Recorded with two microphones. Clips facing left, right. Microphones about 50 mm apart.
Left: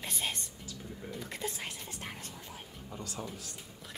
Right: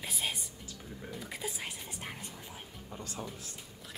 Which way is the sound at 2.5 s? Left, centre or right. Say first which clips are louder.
Left 1 dB; centre.